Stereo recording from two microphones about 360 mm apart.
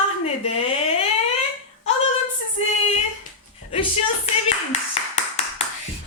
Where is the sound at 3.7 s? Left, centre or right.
Centre.